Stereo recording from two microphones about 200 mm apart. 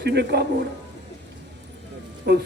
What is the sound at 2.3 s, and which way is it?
Speech, 55° right (ahead or behind).